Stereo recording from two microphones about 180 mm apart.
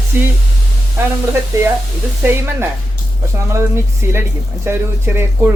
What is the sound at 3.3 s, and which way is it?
Speech, 15° right (ahead or behind).